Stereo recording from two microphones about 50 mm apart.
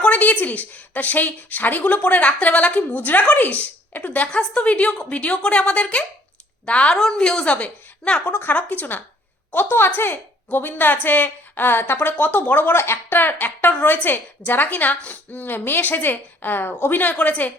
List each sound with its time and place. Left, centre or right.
0.0 s a woman's voice: left
4.3 s a woman's voice: left
8.3 s a woman's voice: left
9.6 s a woman's voice: left
12.1 s a woman's voice: left
12.7 s a woman's voice: left